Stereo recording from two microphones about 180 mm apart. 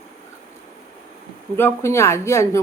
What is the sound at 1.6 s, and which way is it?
Speech, 15° left (ahead or behind).